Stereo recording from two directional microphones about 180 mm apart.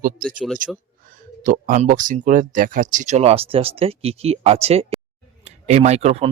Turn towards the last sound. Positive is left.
turn(degrees=-35)  # may be behind; listen again after turning